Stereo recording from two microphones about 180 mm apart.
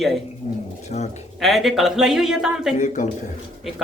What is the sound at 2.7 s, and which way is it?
Speech, 45° left (ahead or behind).